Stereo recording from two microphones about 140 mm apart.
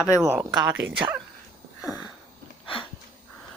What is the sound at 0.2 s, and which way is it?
Speech, 10° right (ahead or behind).